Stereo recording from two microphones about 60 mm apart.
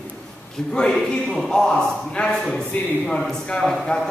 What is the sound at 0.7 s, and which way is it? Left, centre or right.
A man's voice, centre.